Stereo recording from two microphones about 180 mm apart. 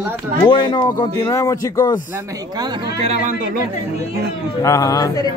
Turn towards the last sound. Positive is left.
turn(degrees=20)  # may be behind; listen again after turning